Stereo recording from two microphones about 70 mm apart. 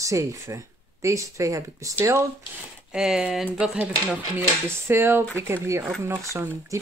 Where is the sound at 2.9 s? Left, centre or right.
Centre.